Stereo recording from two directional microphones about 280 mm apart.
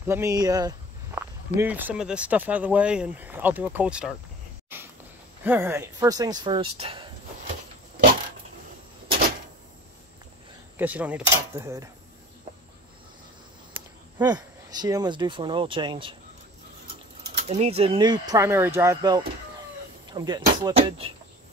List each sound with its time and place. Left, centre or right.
0.1 s speech: centre
4.7 s sniff: centre
5.4 s speech: centre
10.8 s speech: centre
14.1 s speech: centre
17.4 s speech: right